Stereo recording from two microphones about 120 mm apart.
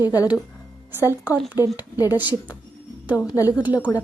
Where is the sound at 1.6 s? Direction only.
30° left (ahead or behind).